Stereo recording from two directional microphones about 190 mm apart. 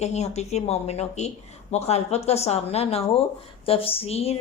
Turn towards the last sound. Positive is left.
turn(degrees=30)  # may be behind; listen again after turning